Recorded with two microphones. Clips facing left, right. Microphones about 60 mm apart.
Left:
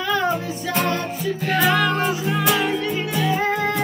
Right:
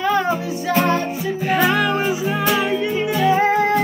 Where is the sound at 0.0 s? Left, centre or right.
Right.